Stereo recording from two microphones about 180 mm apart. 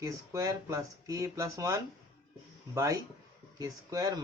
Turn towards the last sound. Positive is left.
turn(degrees=-20)  # may be behind; listen again after turning